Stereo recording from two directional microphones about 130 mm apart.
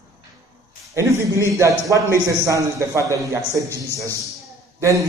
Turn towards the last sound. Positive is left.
turn(degrees=-25)  # may be behind; listen again after turning